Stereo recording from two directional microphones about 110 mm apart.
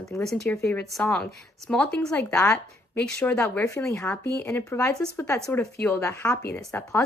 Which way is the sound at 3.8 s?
25° left (ahead or behind).